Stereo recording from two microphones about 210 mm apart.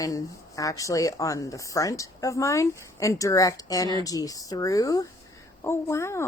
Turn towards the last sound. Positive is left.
turn(degrees=15)  # may be behind; listen again after turning